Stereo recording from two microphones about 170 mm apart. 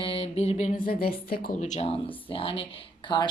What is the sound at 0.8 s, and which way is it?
Speech, 60° left (ahead or behind).